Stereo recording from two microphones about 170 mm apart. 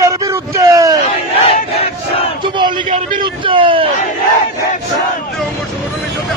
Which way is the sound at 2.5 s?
25° right (ahead or behind).